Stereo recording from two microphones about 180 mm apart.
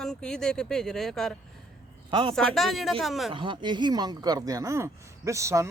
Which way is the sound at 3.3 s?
25° right (ahead or behind).